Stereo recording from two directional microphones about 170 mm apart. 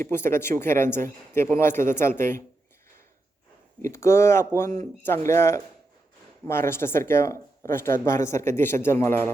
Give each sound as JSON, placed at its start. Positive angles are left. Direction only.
{"t": 0.0, "sound": "speech", "side_deg": 15}
{"t": 3.8, "sound": "speech", "side_deg": 15}